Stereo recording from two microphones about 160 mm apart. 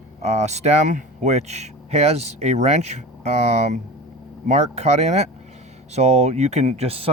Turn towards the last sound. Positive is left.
turn(degrees=-40)  # may be behind; listen again after turning